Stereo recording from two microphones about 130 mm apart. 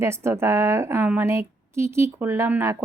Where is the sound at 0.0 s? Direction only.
20° right (ahead or behind).